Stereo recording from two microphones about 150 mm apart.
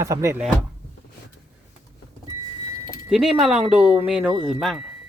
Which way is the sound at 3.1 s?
5° right (ahead or behind).